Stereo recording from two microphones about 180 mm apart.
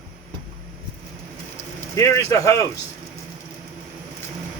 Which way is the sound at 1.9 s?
15° left (ahead or behind).